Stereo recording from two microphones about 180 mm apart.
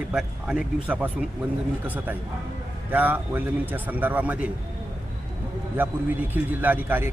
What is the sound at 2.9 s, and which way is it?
A man's voice, 10° right (ahead or behind).